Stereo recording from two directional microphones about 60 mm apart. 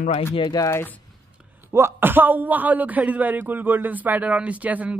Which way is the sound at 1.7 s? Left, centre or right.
Right.